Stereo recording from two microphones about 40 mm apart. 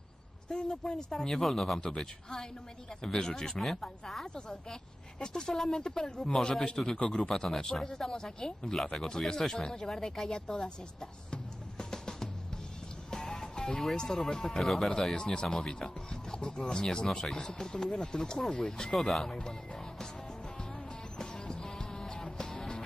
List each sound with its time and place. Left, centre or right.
0.4 s speech: centre
1.8 s speech: centre
11.8 s music: centre
13.9 s speech: centre
14.6 s speech: centre
14.8 s speech: centre
18.9 s speech: centre
19.2 s speech: centre
21.2 s music: centre